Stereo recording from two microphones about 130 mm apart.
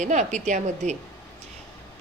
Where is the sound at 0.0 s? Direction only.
65° right (ahead or behind).